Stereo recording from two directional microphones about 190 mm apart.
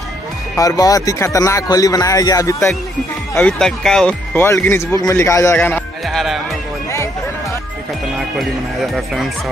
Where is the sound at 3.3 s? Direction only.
5° left (ahead or behind).